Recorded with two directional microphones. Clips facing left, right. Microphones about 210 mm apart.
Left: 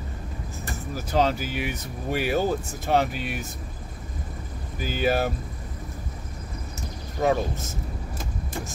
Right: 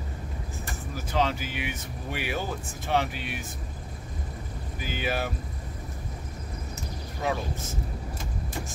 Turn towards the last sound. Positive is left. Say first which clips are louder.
# left 7 dB
turn(degrees=45)  # may be behind; listen again after turning